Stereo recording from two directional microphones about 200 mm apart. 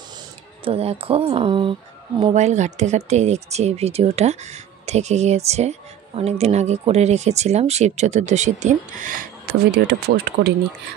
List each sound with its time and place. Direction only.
0.7 s speech: 30° right (ahead or behind); by 10.5 s 55° right (ahead or behind)